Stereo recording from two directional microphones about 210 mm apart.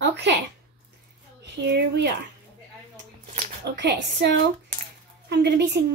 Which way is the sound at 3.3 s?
50° right (ahead or behind).